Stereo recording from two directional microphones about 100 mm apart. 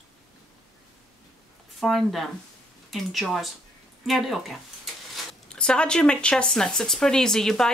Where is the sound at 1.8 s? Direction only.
Centre (ahead or behind).